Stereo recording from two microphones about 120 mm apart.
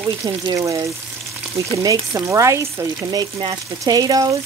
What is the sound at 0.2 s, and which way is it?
Speech, 30° right (ahead or behind).